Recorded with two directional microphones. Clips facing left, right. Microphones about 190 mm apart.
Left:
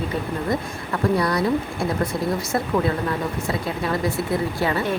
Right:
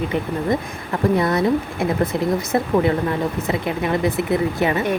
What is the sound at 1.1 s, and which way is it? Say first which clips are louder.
Speech: right 3 dB; 25° right (ahead or behind).